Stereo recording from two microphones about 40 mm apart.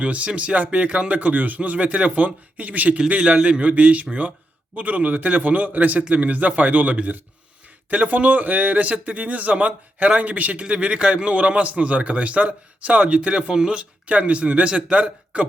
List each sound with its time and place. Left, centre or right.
0.0 s a man's voice: right
1.3 s a man's voice: right
3.2 s a man's voice: right
3.6 s a man's voice: right